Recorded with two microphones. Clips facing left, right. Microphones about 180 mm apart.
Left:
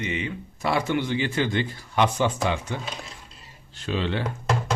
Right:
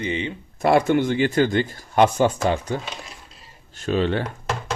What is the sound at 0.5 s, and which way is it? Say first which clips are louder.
Speech: right 7 dB; 50° right (ahead or behind).